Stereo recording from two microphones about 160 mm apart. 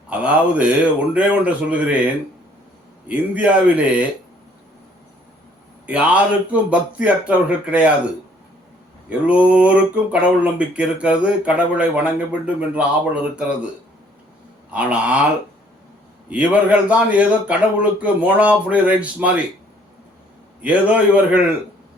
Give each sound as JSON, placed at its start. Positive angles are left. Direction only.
{"t": 0.1, "sound": "speech", "side_deg": -10}
{"t": 3.1, "sound": "speech", "side_deg": -10}
{"t": 5.8, "sound": "speech", "side_deg": -10}
{"t": 14.7, "sound": "speech", "side_deg": -10}
{"t": 16.3, "sound": "speech", "side_deg": -10}
{"t": 20.6, "sound": "speech", "side_deg": -10}